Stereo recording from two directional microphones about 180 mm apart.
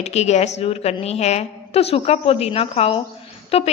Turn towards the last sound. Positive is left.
turn(degrees=35)  # may be behind; listen again after turning